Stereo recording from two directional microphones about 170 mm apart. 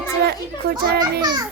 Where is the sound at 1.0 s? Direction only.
25° right (ahead or behind).